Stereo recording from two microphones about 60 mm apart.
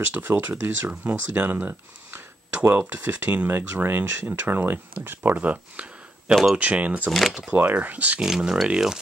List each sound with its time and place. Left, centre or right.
0.0 s speech: right
7.1 s speech: centre
7.5 s speech: right
8.2 s speech: centre